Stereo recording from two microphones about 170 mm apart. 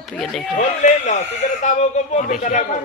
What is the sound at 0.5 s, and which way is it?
Speech, 45° left (ahead or behind).